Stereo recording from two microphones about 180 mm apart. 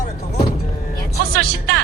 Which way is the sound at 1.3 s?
60° right (ahead or behind).